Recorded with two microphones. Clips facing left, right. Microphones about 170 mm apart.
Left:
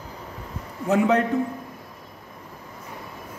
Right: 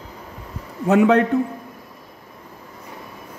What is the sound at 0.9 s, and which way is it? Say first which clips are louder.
Speech: right 5 dB; 65° right (ahead or behind).